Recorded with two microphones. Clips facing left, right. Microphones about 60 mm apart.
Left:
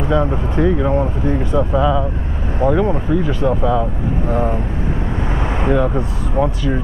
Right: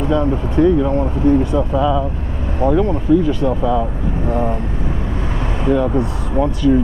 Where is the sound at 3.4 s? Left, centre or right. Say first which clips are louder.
Even; centre.